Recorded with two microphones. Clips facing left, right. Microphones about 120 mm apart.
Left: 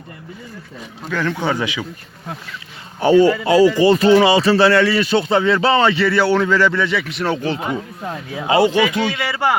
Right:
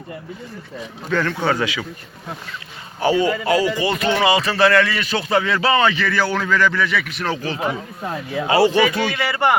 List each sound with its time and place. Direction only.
1.1 s speech: 10° left (ahead or behind)
3.2 s speech: 30° left (ahead or behind)
7.6 s speech: 5° right (ahead or behind)
8.4 s speech: 15° left (ahead or behind)